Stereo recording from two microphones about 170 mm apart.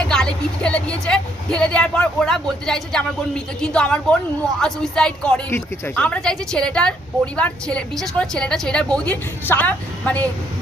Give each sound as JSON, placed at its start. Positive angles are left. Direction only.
{"t": 0.0, "sound": "speech", "side_deg": 5}